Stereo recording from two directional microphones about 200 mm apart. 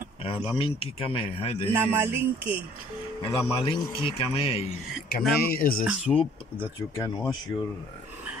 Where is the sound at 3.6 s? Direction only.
25° left (ahead or behind).